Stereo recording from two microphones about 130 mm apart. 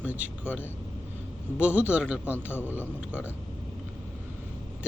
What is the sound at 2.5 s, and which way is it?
Speech, 15° left (ahead or behind).